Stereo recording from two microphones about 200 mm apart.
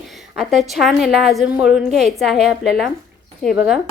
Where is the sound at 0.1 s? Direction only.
Centre (ahead or behind).